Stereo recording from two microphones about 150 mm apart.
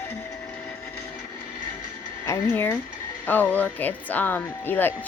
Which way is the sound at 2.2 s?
15° left (ahead or behind).